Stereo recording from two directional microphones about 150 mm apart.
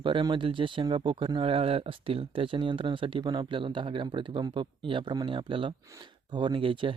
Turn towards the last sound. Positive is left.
turn(degrees=-35)  # may be behind; listen again after turning